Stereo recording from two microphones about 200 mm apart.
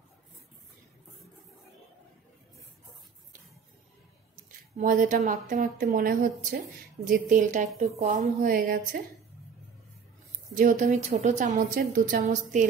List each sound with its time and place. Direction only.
4.7 s a woman's voice: 40° right (ahead or behind)
10.5 s a woman's voice: 40° right (ahead or behind)